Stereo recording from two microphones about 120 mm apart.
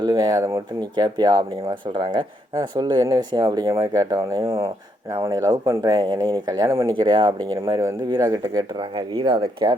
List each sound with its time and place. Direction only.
0.0 s speech: 35° right (ahead or behind)
6.9 s speech: 45° right (ahead or behind)
7.5 s speech: 30° right (ahead or behind); by 9.7 s 45° right (ahead or behind)